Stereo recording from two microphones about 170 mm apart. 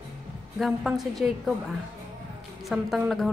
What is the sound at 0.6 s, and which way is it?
Speech, centre (ahead or behind).